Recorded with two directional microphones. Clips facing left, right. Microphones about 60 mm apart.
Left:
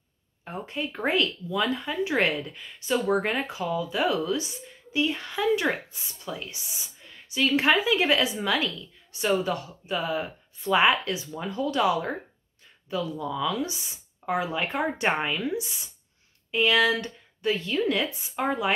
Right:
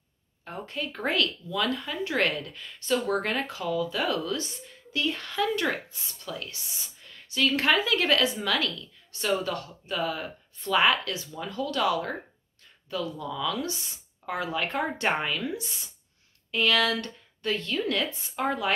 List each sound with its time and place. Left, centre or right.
0.5 s speech: centre